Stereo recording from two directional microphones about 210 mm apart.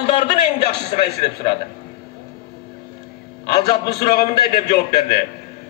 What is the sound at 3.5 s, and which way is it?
A man's voice, 25° left (ahead or behind).